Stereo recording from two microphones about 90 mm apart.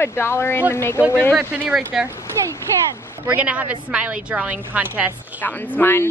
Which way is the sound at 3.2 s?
15° right (ahead or behind).